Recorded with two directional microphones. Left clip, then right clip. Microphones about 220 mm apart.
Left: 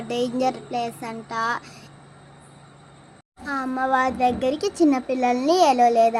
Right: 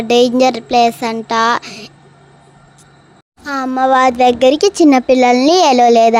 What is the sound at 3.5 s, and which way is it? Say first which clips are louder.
Speech: right 10 dB; 40° right (ahead or behind).